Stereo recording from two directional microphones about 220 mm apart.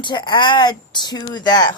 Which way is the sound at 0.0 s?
20° left (ahead or behind).